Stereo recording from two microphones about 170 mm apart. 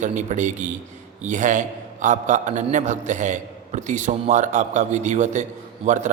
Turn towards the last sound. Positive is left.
turn(degrees=-45)  # may be behind; listen again after turning